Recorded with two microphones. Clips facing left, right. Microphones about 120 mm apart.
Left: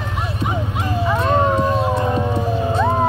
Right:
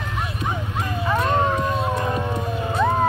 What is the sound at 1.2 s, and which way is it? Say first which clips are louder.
Howl: left 4 dB; 25° left (ahead or behind).